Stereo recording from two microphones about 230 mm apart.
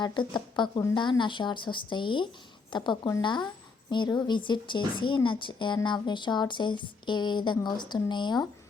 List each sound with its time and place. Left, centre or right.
0.0 s a woman's voice: centre